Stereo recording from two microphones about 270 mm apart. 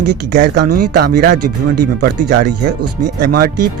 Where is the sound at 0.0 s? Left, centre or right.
Right.